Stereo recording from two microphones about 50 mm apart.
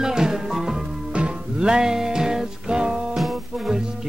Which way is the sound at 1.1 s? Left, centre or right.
Centre.